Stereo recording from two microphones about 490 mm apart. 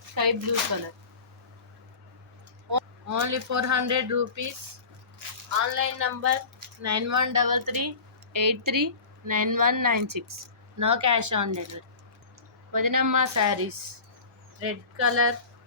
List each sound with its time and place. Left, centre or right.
0.1 s a sound: right
2.6 s speech: right
5.7 s speech: right
12.7 s speech: right